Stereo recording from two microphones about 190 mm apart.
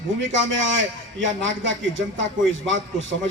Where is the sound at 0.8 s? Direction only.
80° right.